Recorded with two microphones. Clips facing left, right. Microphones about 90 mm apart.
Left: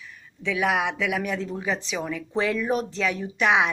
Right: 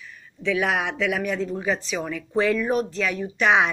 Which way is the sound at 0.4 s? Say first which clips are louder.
Right 1 dB; 15° left (ahead or behind).